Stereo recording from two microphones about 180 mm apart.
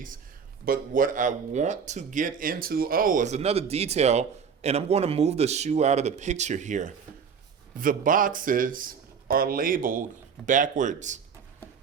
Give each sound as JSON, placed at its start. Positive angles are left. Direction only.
{"t": 0.6, "sound": "a man's voice", "side_deg": -50}